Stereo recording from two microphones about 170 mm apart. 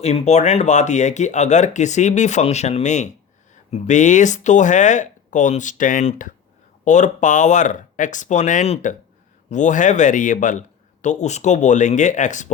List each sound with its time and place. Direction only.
0.0 s speech: 40° left (ahead or behind)